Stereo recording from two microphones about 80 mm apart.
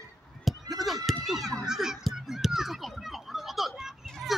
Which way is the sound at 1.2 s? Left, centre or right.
Centre.